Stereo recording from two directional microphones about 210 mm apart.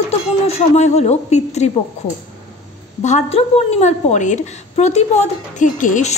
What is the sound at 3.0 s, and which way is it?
A woman's voice, 35° left (ahead or behind).